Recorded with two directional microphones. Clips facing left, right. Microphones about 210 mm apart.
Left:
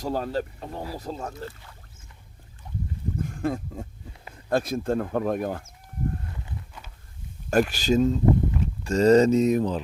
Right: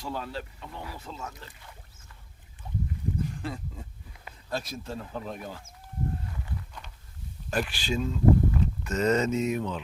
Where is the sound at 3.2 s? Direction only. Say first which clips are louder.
Left 7 dB; 50° left (ahead or behind).